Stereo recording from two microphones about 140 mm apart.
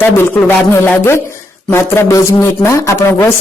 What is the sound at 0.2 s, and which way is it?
Speech, 15° left (ahead or behind).